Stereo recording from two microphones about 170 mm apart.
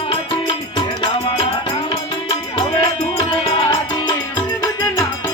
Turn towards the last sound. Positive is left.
turn(degrees=25)  # may be behind; listen again after turning